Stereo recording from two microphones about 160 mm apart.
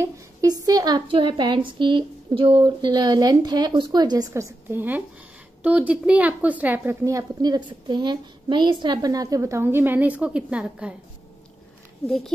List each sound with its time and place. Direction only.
0.0 s a woman's voice: 20° right (ahead or behind)